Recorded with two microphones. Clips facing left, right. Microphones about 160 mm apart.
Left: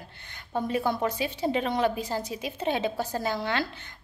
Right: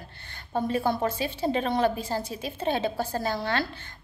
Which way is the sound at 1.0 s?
15° left (ahead or behind).